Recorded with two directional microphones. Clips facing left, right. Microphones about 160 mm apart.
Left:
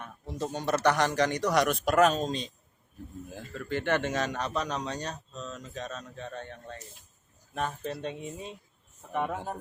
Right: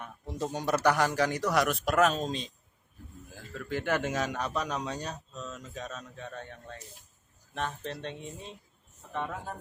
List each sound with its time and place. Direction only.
0.0 s speech: 15° right (ahead or behind)
3.5 s speech: centre (ahead or behind)
9.3 s speech: 25° left (ahead or behind)